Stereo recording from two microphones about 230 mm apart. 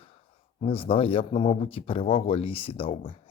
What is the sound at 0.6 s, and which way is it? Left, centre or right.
Speech, left.